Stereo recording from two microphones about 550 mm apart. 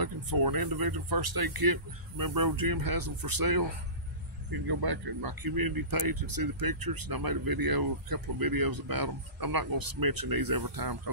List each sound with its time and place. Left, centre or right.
0.0 s speech: right